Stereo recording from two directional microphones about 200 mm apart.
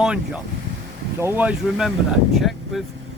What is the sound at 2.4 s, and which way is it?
Vehicle, centre (ahead or behind).